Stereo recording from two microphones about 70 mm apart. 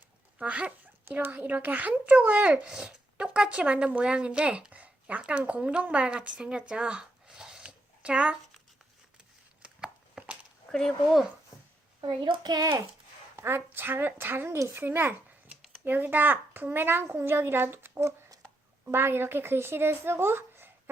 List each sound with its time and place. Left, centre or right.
0.3 s dog: centre
1.1 s speech: right
9.6 s chopping: centre
10.7 s speech: centre
11.5 s a sound: centre
11.9 s a child's voice: right
13.3 s a woman's voice: right